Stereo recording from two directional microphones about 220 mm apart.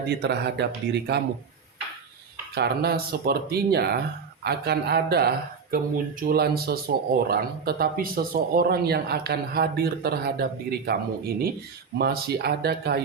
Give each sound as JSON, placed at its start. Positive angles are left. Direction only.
{"t": 0.1, "sound": "speech", "side_deg": -50}
{"t": 2.6, "sound": "speech", "side_deg": -45}